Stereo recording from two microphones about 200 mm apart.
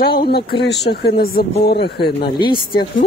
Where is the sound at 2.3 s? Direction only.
25° left (ahead or behind).